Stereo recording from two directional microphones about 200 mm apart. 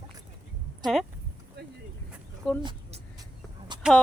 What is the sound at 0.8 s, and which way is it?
Speech, centre (ahead or behind).